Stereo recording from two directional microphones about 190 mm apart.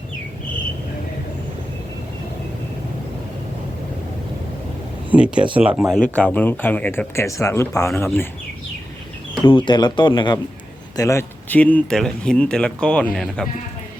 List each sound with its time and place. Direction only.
5.1 s speech: 5° right (ahead or behind)
6.0 s speech: 5° left (ahead or behind)
9.4 s speech: 25° left (ahead or behind); by 13.5 s 5° left (ahead or behind)